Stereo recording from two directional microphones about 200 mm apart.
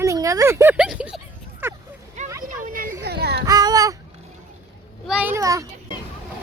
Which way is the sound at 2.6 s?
45° right (ahead or behind).